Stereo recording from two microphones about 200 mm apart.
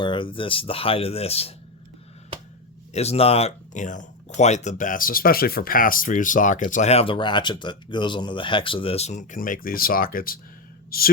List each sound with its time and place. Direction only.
0.0 s speech: 25° left (ahead or behind)
2.9 s speech: 30° left (ahead or behind)
10.9 s a sound: 45° left (ahead or behind)